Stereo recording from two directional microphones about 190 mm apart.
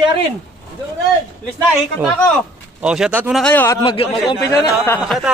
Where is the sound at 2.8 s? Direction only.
5° right (ahead or behind).